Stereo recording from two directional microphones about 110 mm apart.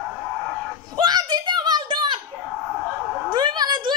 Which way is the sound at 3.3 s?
40° right (ahead or behind).